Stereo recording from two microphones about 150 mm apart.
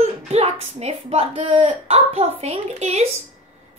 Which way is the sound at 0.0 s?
45° right (ahead or behind).